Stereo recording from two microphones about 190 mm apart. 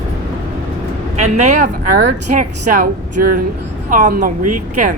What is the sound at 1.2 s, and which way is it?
Speech, 35° right (ahead or behind).